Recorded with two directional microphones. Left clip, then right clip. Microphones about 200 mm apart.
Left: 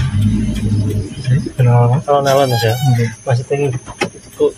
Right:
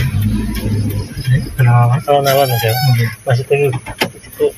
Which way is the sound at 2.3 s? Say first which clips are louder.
Even; 15° left (ahead or behind).